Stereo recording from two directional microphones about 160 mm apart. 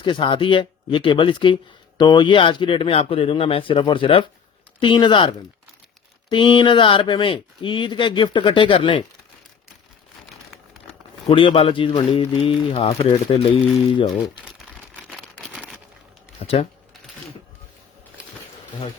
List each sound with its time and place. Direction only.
0.0 s speech: 30° left (ahead or behind)
11.3 s speech: 35° left (ahead or behind)
14.1 s crumpling: centre (ahead or behind)
16.4 s speech: 40° left (ahead or behind)